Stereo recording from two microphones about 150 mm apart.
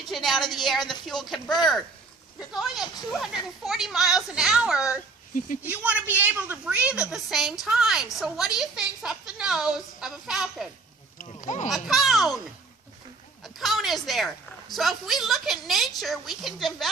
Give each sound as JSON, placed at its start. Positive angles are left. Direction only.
{"t": 0.0, "sound": "a woman's voice", "side_deg": 0}
{"t": 2.5, "sound": "a woman's voice", "side_deg": 0}
{"t": 11.3, "sound": "speech", "side_deg": 55}
{"t": 11.7, "sound": "a woman's voice", "side_deg": 0}
{"t": 13.4, "sound": "a woman's voice", "side_deg": 0}